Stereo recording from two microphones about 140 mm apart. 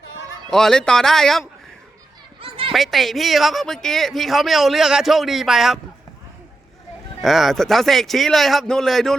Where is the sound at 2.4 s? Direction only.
40° right (ahead or behind).